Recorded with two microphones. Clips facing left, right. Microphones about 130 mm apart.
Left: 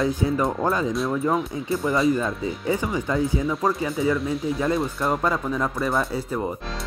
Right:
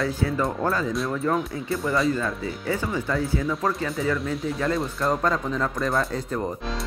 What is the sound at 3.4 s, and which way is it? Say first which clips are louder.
Speech: left 2 dB; 5° left (ahead or behind).